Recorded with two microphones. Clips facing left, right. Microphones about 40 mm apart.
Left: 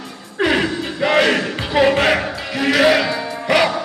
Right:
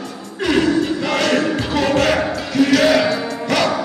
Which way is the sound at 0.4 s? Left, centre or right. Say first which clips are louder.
Right 2 dB; left.